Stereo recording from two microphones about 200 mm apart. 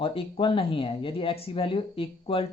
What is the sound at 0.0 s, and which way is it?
Speech, 25° left (ahead or behind).